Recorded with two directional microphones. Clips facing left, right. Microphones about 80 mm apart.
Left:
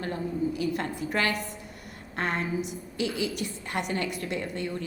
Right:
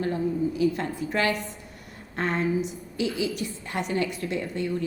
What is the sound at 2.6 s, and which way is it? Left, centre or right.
A woman's voice, left.